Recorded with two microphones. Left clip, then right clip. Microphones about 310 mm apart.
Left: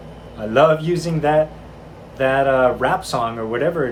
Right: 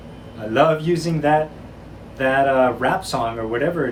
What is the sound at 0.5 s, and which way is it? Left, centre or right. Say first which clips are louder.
Speech: left 2 dB; centre.